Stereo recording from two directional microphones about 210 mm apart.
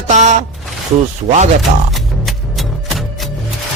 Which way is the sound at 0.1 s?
35° right (ahead or behind).